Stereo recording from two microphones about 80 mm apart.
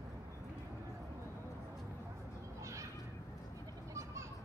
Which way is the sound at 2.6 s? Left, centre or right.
Right.